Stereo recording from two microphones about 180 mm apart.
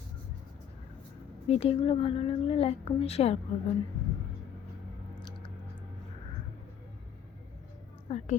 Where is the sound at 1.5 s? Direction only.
35° left (ahead or behind).